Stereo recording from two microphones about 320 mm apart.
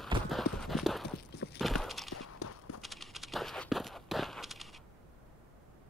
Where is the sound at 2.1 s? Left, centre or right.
Left.